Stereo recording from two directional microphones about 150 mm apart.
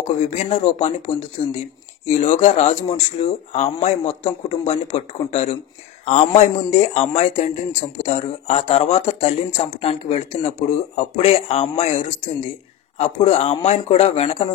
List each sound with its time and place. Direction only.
0.0 s speech: 45° left (ahead or behind)